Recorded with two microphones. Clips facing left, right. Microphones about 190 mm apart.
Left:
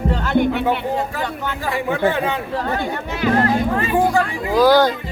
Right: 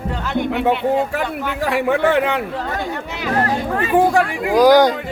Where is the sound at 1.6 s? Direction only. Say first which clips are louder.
Right 3 dB; 75° right (ahead or behind).